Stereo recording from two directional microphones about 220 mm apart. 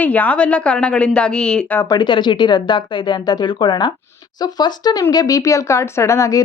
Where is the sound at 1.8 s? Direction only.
20° left (ahead or behind).